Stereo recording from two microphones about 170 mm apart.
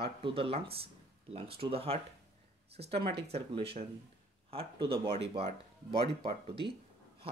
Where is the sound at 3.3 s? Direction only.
30° right (ahead or behind).